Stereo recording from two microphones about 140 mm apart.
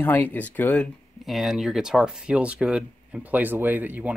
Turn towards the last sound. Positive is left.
turn(degrees=-15)  # may be behind; listen again after turning